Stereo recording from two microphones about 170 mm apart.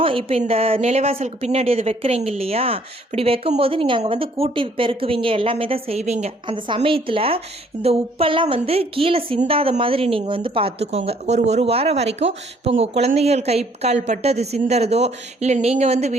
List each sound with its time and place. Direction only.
0.0 s speech: 30° right (ahead or behind)